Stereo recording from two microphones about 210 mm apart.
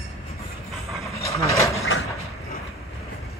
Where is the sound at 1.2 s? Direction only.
15° left (ahead or behind).